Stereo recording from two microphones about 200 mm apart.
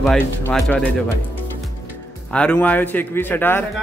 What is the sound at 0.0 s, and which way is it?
Speech, centre (ahead or behind).